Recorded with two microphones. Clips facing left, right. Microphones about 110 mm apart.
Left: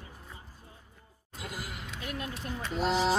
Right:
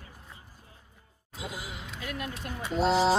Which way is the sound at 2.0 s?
30° left (ahead or behind).